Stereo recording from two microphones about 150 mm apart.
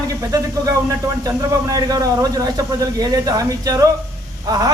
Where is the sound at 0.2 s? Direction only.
25° right (ahead or behind).